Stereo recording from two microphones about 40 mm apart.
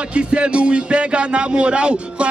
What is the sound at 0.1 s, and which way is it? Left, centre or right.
Speech, right.